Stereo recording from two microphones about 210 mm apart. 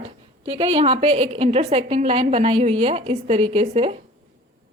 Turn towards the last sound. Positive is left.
turn(degrees=-30)  # may be behind; listen again after turning